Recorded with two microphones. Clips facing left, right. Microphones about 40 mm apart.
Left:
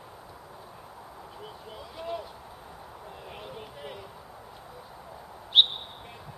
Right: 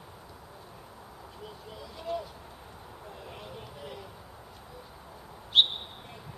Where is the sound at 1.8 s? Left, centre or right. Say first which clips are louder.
Right 1 dB; centre.